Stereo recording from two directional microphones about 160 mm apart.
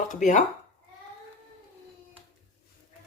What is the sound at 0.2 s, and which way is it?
Speech, 50° left (ahead or behind).